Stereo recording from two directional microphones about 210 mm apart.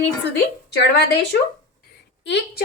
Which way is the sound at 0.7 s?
55° left (ahead or behind).